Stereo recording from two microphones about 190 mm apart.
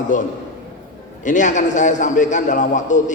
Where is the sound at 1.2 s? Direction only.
40° left (ahead or behind).